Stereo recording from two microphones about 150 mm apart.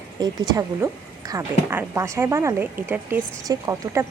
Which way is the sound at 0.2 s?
25° right (ahead or behind).